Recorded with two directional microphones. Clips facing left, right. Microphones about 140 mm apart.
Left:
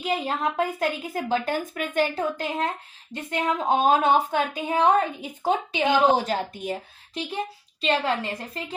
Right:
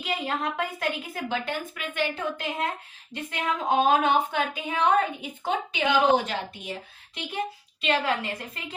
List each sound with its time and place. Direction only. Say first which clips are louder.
0.0 s a woman's voice: left 3 dB; 30° left (ahead or behind)
7.8 s a woman's voice: left 2 dB; 30° left (ahead or behind)